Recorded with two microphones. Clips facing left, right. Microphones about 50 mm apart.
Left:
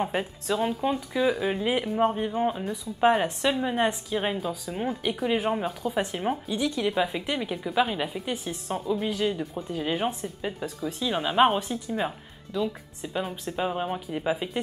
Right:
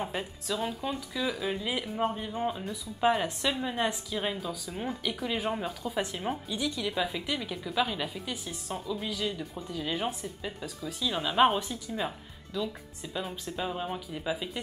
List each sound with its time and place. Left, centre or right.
0.0 s speech: centre
0.5 s a woman's voice: left
3.4 s a woman's voice: centre
5.7 s speech: centre
5.9 s a woman's voice: centre